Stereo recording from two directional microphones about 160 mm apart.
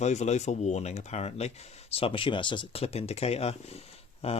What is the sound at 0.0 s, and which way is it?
Speech, 45° left (ahead or behind).